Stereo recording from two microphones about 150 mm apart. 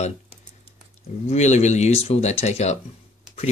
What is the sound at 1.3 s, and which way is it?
Speech, 50° left (ahead or behind).